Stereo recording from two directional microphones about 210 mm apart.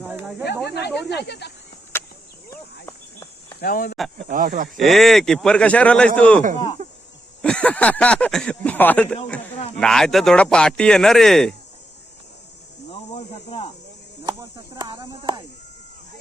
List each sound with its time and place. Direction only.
0.0 s snake: 5° right (ahead or behind)
0.6 s speech: 50° left (ahead or behind)
1.9 s a sound: 10° left (ahead or behind)
3.6 s speech: 45° left (ahead or behind)
4.3 s speech: 40° right (ahead or behind)
4.8 s speech: centre (ahead or behind)
7.4 s speech: 5° left (ahead or behind)
12.9 s cricket: 25° left (ahead or behind)
14.3 s a sound: 20° right (ahead or behind)